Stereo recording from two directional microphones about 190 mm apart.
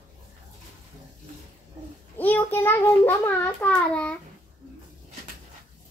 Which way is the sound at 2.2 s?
10° left (ahead or behind).